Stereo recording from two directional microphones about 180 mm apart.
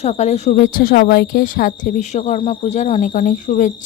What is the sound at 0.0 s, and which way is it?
Speech, 40° left (ahead or behind).